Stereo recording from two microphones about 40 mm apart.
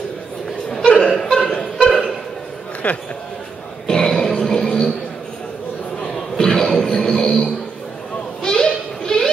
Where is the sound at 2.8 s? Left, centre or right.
Left.